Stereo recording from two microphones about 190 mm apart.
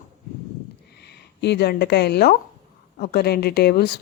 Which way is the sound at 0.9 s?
60° left (ahead or behind).